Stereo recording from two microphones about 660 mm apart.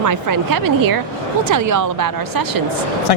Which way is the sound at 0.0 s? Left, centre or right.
Right.